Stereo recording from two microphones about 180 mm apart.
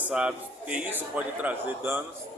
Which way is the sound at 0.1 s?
5° right (ahead or behind).